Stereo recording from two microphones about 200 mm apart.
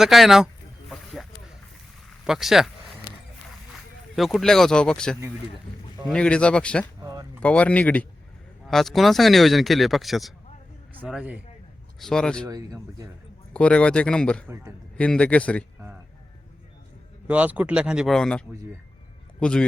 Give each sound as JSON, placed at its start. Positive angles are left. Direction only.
{"t": 0.0, "sound": "speech", "side_deg": 0}
{"t": 0.9, "sound": "a sound", "side_deg": 0}
{"t": 2.2, "sound": "speech", "side_deg": 0}
{"t": 4.1, "sound": "speech", "side_deg": 0}
{"t": 7.0, "sound": "a sound", "side_deg": -15}
{"t": 7.4, "sound": "a man's voice", "side_deg": 5}
{"t": 12.5, "sound": "speech", "side_deg": -15}
{"t": 13.5, "sound": "speech", "side_deg": 5}
{"t": 14.4, "sound": "speech", "side_deg": -15}
{"t": 14.9, "sound": "a man's voice", "side_deg": 5}
{"t": 17.2, "sound": "a man's voice", "side_deg": -5}